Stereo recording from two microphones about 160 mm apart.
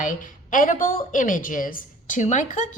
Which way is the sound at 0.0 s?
55° left (ahead or behind).